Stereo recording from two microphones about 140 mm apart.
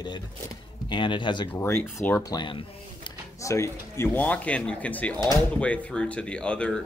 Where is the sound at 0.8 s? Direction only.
35° left (ahead or behind).